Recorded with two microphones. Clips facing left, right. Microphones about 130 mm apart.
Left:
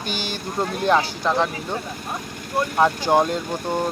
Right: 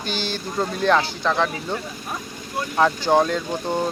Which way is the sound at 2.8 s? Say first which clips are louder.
Right 1 dB; 10° left (ahead or behind).